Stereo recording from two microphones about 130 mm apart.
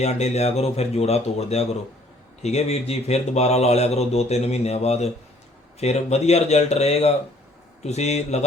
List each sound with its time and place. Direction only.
0.0 s speech: 60° left (ahead or behind)